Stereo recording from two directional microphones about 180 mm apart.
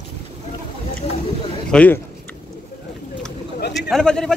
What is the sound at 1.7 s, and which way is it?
Speech, 5° left (ahead or behind).